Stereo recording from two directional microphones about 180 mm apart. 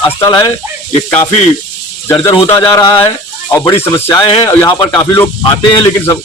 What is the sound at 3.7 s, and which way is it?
Speech, 15° left (ahead or behind).